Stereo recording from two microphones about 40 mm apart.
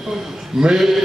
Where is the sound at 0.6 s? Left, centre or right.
Centre.